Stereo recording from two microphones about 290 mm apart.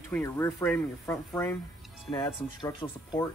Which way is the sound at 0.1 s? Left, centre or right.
Centre.